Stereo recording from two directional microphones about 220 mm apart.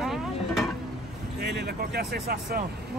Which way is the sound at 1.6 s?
50° right (ahead or behind).